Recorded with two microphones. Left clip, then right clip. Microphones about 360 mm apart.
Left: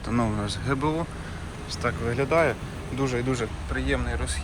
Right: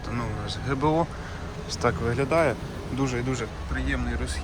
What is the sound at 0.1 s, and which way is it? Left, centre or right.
Speech, centre.